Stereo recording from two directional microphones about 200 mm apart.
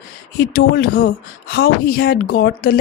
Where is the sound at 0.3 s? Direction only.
50° left (ahead or behind).